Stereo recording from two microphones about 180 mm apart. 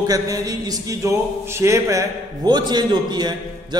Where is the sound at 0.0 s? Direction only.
20° right (ahead or behind).